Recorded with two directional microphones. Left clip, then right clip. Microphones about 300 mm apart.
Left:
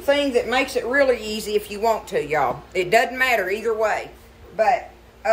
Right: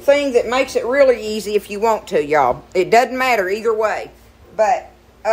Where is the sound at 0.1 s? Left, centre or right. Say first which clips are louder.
Right 5 dB; centre.